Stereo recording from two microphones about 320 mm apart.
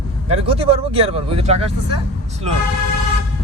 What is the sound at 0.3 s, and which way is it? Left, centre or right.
Speech, centre.